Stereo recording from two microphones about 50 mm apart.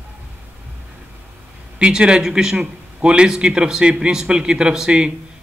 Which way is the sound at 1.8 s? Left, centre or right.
Centre.